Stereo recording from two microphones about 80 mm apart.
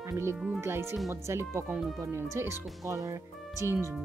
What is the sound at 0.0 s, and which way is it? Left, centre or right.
Speech, right.